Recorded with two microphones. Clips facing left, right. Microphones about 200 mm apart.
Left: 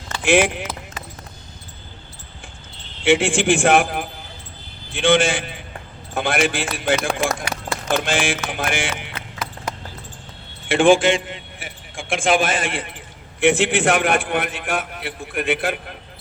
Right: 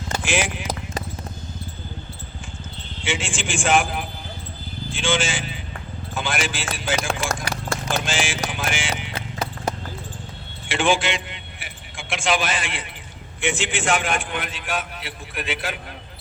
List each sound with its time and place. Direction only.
0.3 s a man's voice: 60° left (ahead or behind)
3.0 s a man's voice: 60° left (ahead or behind)
9.1 s clip-clop: 30° right (ahead or behind)
10.7 s a man's voice: 50° left (ahead or behind)